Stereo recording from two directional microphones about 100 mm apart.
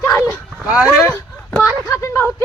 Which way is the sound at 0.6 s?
10° right (ahead or behind).